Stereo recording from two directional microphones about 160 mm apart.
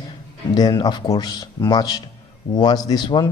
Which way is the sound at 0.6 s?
25° left (ahead or behind).